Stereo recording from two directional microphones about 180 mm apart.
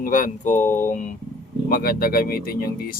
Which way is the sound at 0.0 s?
45° left (ahead or behind).